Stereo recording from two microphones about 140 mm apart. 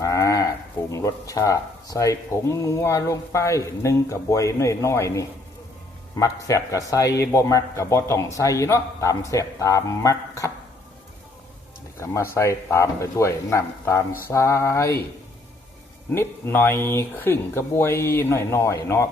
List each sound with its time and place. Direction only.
0.0 s a man's voice: 20° left (ahead or behind)
11.9 s a man's voice: 20° left (ahead or behind)
16.1 s speech: 15° left (ahead or behind)